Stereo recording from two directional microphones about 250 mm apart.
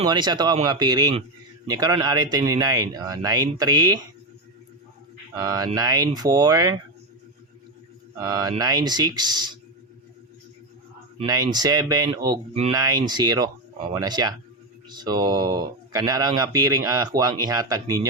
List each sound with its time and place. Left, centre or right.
0.0 s speech: centre
5.4 s speech: centre
8.2 s speech: centre
11.2 s speech: centre